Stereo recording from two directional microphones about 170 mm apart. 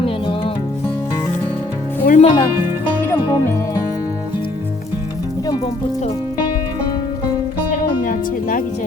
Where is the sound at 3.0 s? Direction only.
15° left (ahead or behind).